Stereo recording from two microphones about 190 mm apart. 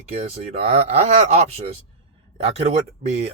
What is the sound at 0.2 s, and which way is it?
Speech, 30° right (ahead or behind).